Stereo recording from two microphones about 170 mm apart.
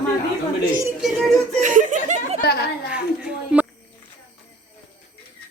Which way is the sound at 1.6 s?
50° right (ahead or behind).